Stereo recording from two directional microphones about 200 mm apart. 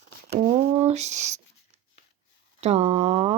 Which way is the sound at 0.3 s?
35° right (ahead or behind).